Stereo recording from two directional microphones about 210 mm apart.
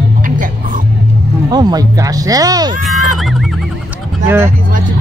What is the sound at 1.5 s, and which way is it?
Speech, 20° right (ahead or behind).